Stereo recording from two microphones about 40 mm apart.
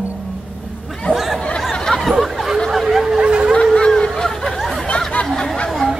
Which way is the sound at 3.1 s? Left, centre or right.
Centre.